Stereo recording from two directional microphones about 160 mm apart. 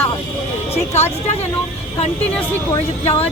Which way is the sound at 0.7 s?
45° left (ahead or behind).